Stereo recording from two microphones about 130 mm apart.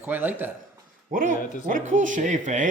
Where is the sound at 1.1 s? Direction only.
90° right.